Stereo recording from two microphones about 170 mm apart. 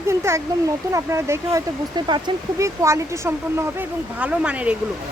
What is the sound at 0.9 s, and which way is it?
Speech, 15° right (ahead or behind).